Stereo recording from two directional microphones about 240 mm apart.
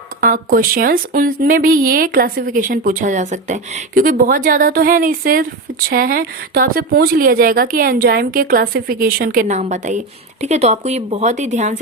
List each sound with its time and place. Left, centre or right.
0.2 s speech: right